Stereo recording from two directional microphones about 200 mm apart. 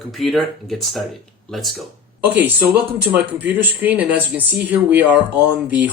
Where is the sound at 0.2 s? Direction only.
Centre (ahead or behind).